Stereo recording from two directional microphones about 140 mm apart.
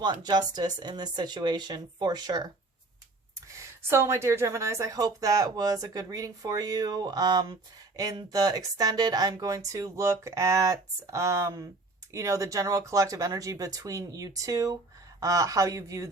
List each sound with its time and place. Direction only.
0.0 s speech: 30° right (ahead or behind)
3.6 s speech: 20° right (ahead or behind)